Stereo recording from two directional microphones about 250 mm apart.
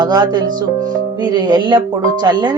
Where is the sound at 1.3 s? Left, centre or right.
Centre.